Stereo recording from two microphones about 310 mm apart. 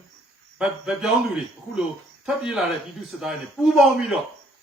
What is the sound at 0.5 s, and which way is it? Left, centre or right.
Speech, centre.